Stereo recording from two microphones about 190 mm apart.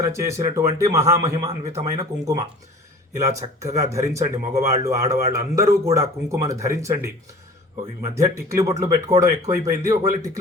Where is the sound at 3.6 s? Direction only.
15° right (ahead or behind).